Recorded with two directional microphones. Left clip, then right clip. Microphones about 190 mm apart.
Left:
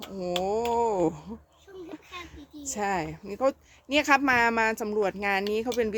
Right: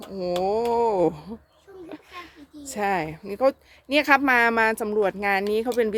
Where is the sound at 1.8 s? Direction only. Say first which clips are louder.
Right 2 dB; 10° right (ahead or behind).